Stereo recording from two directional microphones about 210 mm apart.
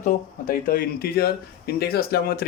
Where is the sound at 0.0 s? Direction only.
40° left (ahead or behind).